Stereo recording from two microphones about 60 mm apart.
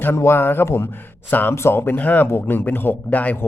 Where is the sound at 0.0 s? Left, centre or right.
Left.